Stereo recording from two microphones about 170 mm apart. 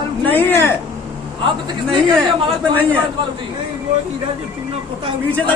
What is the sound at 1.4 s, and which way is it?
Speech, 30° right (ahead or behind).